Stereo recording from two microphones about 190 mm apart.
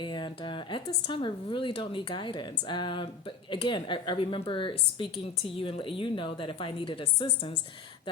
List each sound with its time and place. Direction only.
0.0 s a woman's voice: 25° left (ahead or behind)